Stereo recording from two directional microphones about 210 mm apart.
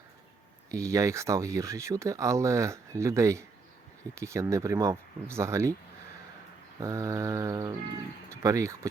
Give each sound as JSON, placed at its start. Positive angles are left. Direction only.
{"t": 0.7, "sound": "speech", "side_deg": -15}
{"t": 6.7, "sound": "speech", "side_deg": -15}